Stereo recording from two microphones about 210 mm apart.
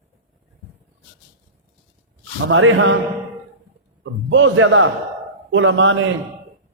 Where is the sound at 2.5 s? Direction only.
70° right (ahead or behind).